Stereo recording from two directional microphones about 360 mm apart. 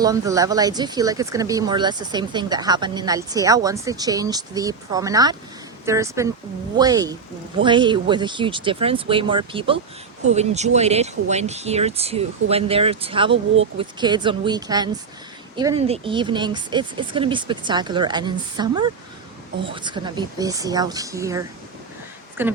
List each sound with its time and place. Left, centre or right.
0.0 s speech: centre